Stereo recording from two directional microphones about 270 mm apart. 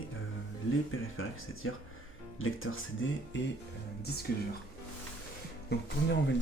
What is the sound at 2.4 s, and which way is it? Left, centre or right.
Speech, left.